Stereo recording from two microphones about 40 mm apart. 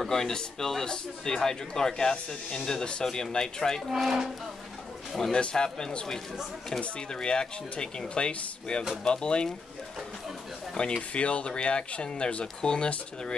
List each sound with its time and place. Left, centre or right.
0.0 s speech: centre
3.9 s speech: centre
5.3 s speech: left
11.0 s speech: left